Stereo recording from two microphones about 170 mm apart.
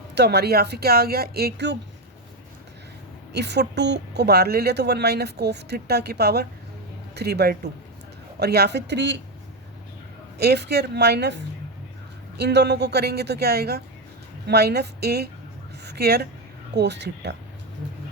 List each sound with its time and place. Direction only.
0.2 s a woman's voice: 70° right (ahead or behind); by 1.8 s 90° right
3.3 s a woman's voice: 80° right
10.3 s a woman's voice: 70° right (ahead or behind)
12.4 s a woman's voice: 80° right
16.7 s speech: 85° right